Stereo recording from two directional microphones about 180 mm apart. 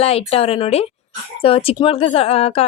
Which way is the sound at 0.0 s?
35° left (ahead or behind).